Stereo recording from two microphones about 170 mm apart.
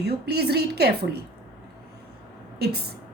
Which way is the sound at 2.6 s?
70° right (ahead or behind).